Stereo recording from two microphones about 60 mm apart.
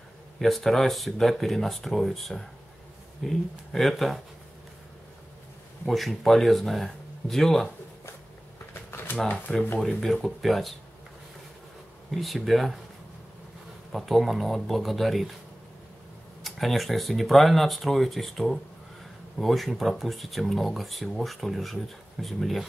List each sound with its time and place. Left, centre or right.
0.4 s speech: centre
5.9 s speech: centre
8.9 s a sound: left
9.5 s speech: centre
12.1 s speech: centre
13.9 s speech: centre
16.4 s speech: centre